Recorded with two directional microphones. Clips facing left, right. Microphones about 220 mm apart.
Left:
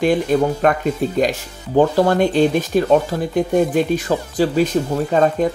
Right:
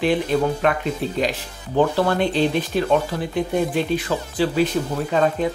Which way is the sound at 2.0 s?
45° left (ahead or behind).